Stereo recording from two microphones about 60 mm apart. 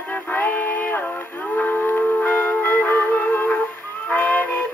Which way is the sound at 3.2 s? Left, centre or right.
Centre.